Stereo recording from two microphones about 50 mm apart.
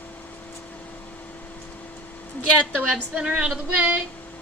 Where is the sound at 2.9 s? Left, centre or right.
Centre.